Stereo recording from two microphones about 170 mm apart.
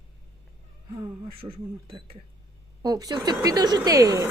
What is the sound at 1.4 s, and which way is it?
Speech, 25° right (ahead or behind).